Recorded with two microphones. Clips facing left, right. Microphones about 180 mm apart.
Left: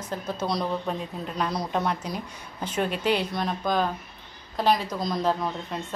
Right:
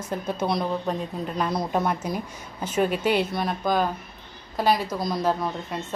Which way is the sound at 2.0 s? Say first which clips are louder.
Right 4 dB; 50° right (ahead or behind).